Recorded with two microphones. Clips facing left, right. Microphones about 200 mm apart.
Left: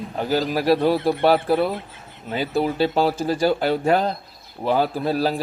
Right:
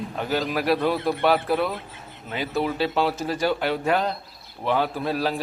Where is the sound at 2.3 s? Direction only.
35° left (ahead or behind).